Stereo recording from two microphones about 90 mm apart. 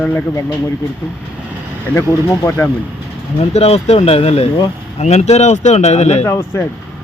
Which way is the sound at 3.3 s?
90° left.